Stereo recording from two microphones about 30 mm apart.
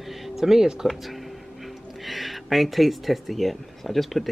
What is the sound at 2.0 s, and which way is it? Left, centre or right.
Speech, centre.